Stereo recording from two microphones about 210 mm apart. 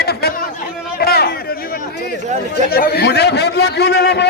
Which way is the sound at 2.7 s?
50° left (ahead or behind).